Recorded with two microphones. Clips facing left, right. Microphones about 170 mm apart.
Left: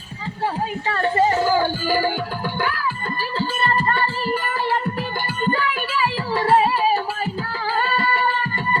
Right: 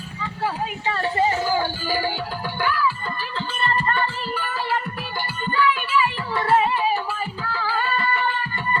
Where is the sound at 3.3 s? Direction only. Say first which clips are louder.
Left 3 dB; 40° left (ahead or behind).